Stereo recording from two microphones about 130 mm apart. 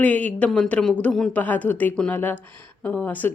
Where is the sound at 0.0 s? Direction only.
10° left (ahead or behind).